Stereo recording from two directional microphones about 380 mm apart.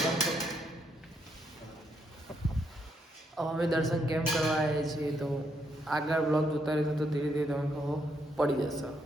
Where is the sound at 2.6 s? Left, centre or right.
Centre.